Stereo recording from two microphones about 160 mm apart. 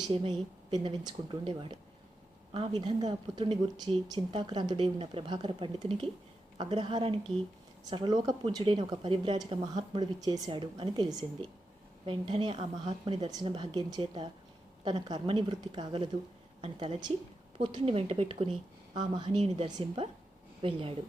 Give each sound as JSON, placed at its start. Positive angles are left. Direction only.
{"t": 0.1, "sound": "speech", "side_deg": -35}
{"t": 12.9, "sound": "speech", "side_deg": -40}
{"t": 13.2, "sound": "speech", "side_deg": -30}